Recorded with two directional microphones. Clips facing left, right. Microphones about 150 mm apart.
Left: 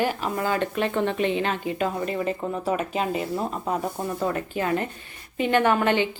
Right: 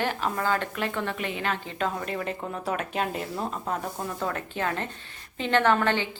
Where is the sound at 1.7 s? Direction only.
5° left (ahead or behind).